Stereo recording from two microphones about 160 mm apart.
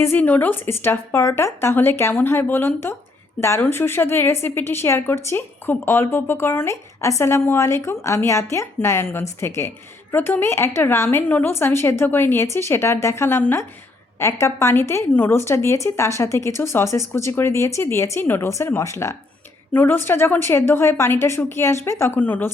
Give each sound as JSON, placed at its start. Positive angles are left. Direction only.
{"t": 0.0, "sound": "a woman's voice", "side_deg": 10}